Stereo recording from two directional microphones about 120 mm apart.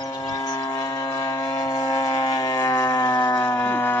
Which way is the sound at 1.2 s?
35° left (ahead or behind).